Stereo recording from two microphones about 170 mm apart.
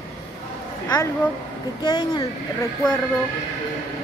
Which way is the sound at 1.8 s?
25° left (ahead or behind).